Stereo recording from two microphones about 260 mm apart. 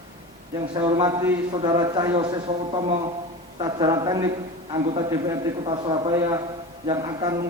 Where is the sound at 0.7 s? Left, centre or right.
Centre.